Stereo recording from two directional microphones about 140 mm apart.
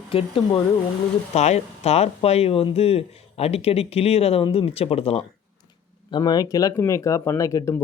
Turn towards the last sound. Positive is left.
turn(degrees=20)  # may be behind; listen again after turning